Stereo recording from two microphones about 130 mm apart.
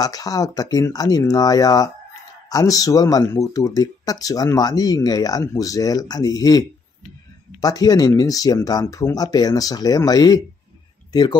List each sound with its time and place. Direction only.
0.0 s speech: 30° left (ahead or behind)
7.6 s speech: 30° left (ahead or behind)